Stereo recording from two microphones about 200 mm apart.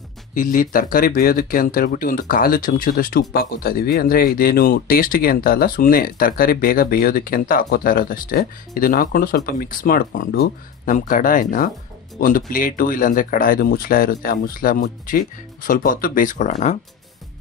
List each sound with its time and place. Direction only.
0.3 s speech: 40° left (ahead or behind)